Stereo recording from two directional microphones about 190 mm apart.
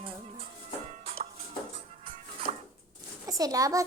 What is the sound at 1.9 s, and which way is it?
Music, 35° right (ahead or behind).